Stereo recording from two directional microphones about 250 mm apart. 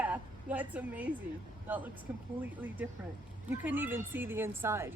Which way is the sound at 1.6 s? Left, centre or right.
Centre.